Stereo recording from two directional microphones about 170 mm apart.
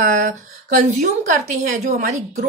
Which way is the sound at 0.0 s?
50° right (ahead or behind).